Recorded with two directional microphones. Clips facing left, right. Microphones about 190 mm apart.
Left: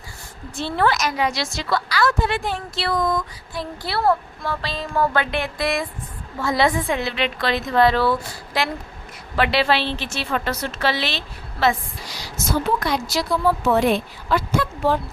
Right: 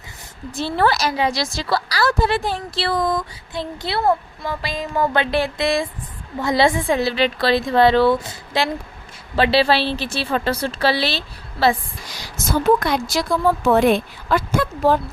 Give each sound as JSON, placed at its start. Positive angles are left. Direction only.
{"t": 0.5, "sound": "a woman's voice", "side_deg": -35}
{"t": 5.3, "sound": "a woman's voice", "side_deg": -30}
{"t": 12.0, "sound": "a woman's voice", "side_deg": -50}